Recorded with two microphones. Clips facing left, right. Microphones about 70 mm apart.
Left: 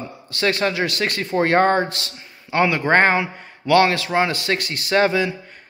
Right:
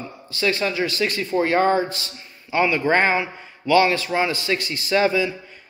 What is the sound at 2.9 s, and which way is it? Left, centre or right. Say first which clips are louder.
Speech: left 4 dB; left.